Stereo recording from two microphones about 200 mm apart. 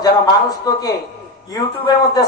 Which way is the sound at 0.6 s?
20° left (ahead or behind).